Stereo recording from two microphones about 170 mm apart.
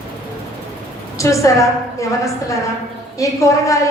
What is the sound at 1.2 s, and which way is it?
A woman's voice, 20° left (ahead or behind).